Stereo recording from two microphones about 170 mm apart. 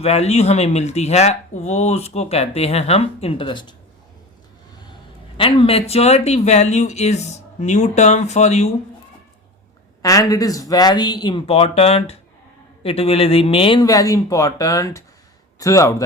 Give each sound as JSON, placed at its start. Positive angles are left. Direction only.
{"t": 0.0, "sound": "speech", "side_deg": 40}
{"t": 5.4, "sound": "speech", "side_deg": 35}
{"t": 10.0, "sound": "speech", "side_deg": 20}